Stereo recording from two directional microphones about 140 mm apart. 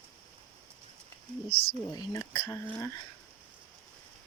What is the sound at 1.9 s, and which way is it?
Speech, 25° left (ahead or behind).